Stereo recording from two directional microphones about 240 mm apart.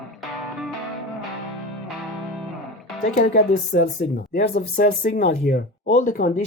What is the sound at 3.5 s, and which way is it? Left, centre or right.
Speech, left.